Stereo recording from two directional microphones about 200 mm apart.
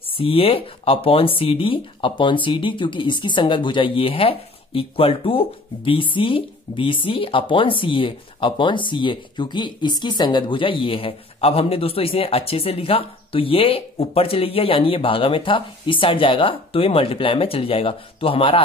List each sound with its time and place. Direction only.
0.1 s speech: 30° left (ahead or behind)